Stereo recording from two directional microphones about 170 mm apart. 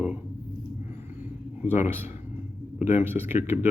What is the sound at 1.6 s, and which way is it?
A man's voice, 10° right (ahead or behind).